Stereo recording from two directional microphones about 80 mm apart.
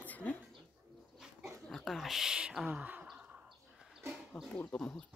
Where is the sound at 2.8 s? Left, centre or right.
Centre.